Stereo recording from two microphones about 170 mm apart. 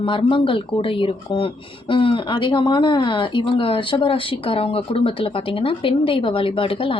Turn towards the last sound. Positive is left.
turn(degrees=30)  # may be behind; listen again after turning